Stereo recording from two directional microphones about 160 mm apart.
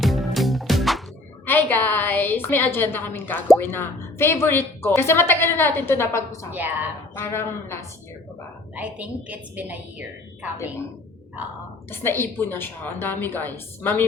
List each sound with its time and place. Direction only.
0.0 s music: centre (ahead or behind)
1.5 s a sound: 10° left (ahead or behind)
3.6 s a woman's voice: 15° left (ahead or behind)
8.7 s a woman's voice: 10° right (ahead or behind)
11.9 s a woman's voice: 15° left (ahead or behind)